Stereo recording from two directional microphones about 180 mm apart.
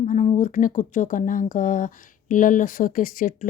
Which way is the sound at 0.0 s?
40° left (ahead or behind).